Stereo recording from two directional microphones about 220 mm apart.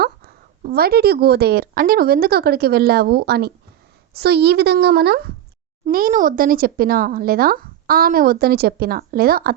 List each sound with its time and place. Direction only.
0.6 s speech: 40° right (ahead or behind)